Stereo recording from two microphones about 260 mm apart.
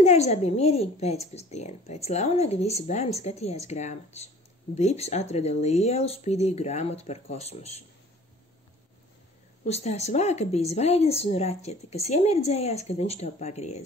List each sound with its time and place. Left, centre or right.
0.0 s speech: left
9.7 s speech: left